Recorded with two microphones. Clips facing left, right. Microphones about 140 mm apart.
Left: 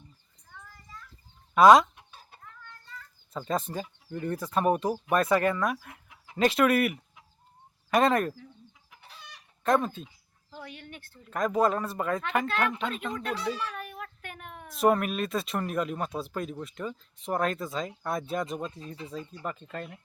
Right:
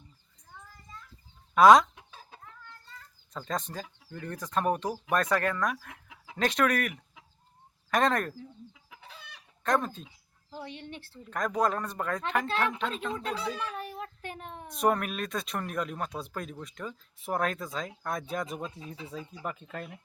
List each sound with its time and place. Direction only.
1.5 s speech: centre (ahead or behind)
2.4 s child singing: 30° right (ahead or behind)
3.3 s speech: 5° left (ahead or behind)
9.6 s speech: 5° left (ahead or behind)
10.6 s speech: 25° right (ahead or behind)
11.2 s speech: 5° left (ahead or behind)
13.6 s child singing: 30° right (ahead or behind)
14.7 s speech: centre (ahead or behind)